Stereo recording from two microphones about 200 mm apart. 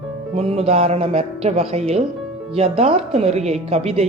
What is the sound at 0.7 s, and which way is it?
Speech, 30° right (ahead or behind).